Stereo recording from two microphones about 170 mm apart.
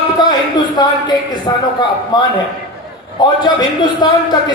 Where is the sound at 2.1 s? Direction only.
25° left (ahead or behind).